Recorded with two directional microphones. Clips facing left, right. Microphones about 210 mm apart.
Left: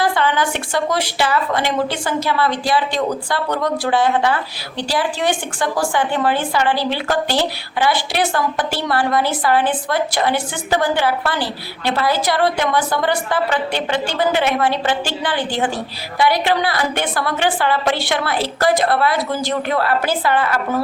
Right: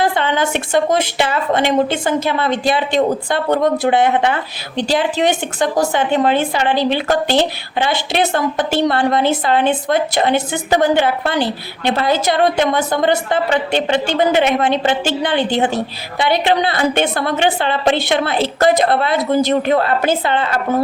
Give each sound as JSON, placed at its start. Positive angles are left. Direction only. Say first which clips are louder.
{"t": 0.0, "sound": "a woman's voice", "louder": "right 1 dB", "side_deg": -20}